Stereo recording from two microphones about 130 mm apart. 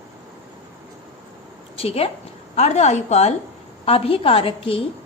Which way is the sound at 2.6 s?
60° left (ahead or behind).